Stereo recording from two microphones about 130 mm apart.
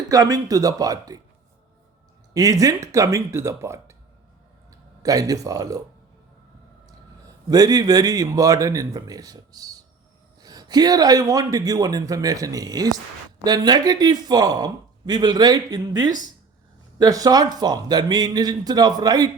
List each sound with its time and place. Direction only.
0.1 s a man's voice: 30° right (ahead or behind)
2.3 s a man's voice: 25° right (ahead or behind)
5.0 s a man's voice: 25° right (ahead or behind)
7.5 s a man's voice: 30° right (ahead or behind)